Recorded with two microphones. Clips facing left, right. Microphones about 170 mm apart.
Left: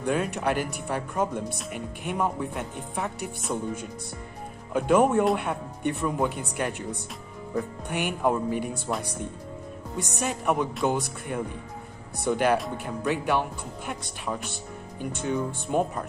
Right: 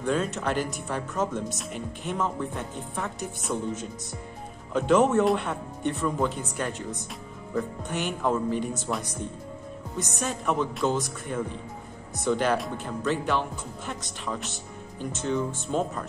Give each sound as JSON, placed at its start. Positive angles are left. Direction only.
{"t": 0.0, "sound": "speech", "side_deg": 15}
{"t": 4.7, "sound": "speech", "side_deg": 10}
{"t": 10.0, "sound": "speech", "side_deg": 15}
{"t": 15.2, "sound": "speech", "side_deg": 15}